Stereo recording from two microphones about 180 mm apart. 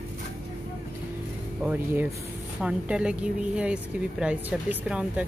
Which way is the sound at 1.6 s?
10° right (ahead or behind).